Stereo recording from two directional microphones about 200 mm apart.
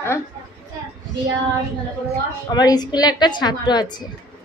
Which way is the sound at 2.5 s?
20° left (ahead or behind).